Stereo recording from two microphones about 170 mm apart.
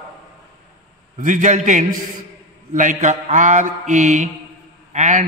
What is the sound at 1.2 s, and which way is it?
A man's voice, 45° right (ahead or behind).